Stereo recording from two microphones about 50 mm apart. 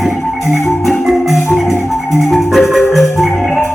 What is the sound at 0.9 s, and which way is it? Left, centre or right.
Marimba, centre.